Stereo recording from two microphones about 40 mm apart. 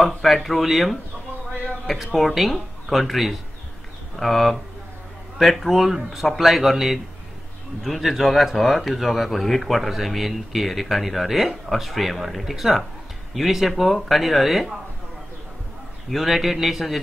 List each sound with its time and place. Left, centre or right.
0.0 s speech: centre
2.1 s speech: centre
16.1 s speech: centre